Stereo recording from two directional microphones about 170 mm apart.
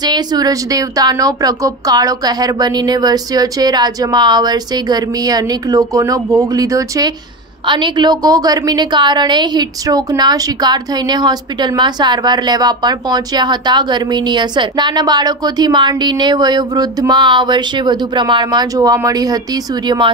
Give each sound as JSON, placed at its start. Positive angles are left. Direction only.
{"t": 0.0, "sound": "a woman's voice", "side_deg": -25}